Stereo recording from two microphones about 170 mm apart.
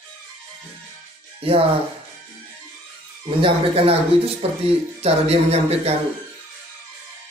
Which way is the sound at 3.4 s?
35° right (ahead or behind).